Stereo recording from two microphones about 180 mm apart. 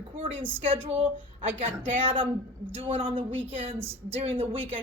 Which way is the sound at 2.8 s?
35° right (ahead or behind).